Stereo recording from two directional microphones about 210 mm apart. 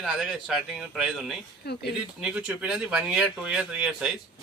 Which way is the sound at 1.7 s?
50° left (ahead or behind).